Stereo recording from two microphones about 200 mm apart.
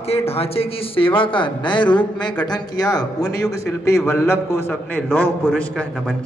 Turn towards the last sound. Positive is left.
turn(degrees=0)  # may be behind; listen again after turning